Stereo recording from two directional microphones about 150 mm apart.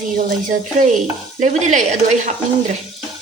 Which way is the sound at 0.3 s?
65° right (ahead or behind).